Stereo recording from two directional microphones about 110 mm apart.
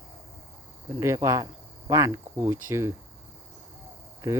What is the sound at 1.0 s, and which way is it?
Speech, 25° right (ahead or behind).